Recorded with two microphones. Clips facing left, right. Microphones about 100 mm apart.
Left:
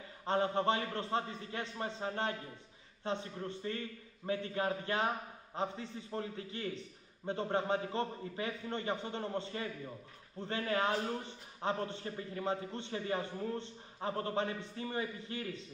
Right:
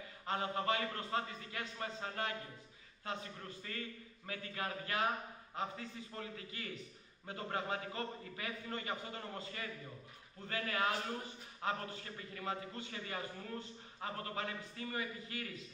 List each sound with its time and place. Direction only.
0.3 s a man's voice: 30° left (ahead or behind)